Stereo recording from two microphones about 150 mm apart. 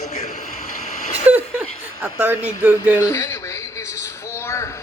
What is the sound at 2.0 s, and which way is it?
Speech, 10° right (ahead or behind).